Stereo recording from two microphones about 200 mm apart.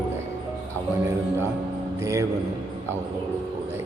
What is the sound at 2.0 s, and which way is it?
Speech, 15° right (ahead or behind).